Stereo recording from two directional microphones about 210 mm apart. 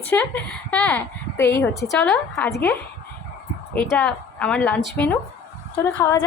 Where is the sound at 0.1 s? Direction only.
10° left (ahead or behind).